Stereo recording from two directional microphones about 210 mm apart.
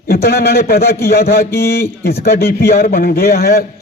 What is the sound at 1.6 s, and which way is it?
Speech, 10° left (ahead or behind).